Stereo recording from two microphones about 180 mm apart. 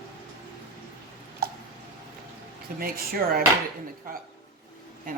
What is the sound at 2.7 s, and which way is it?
Speech, 55° right (ahead or behind).